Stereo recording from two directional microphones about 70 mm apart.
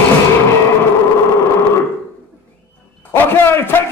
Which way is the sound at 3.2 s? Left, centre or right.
Left.